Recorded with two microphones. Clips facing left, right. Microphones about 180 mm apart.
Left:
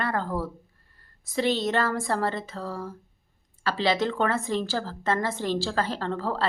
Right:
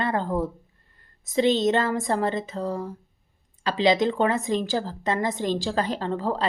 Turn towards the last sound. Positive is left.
turn(degrees=-15)  # may be behind; listen again after turning